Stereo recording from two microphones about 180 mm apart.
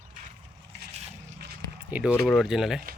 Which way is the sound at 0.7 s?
65° right (ahead or behind).